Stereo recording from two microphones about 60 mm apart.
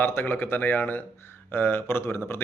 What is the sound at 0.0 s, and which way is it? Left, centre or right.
A man's voice, left.